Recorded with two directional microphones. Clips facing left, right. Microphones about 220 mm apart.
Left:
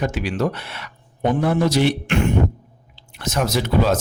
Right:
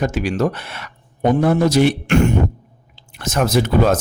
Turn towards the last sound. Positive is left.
turn(degrees=-50)  # may be behind; listen again after turning